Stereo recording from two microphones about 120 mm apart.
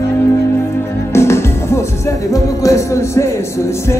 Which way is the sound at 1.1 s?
20° left (ahead or behind).